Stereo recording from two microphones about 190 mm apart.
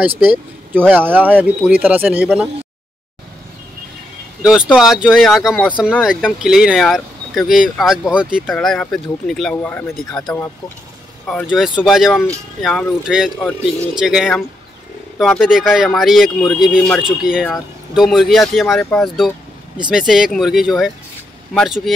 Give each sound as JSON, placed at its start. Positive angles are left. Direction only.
{"t": 0.2, "sound": "speech", "side_deg": -10}
{"t": 4.4, "sound": "speech", "side_deg": -5}
{"t": 11.4, "sound": "speech", "side_deg": -5}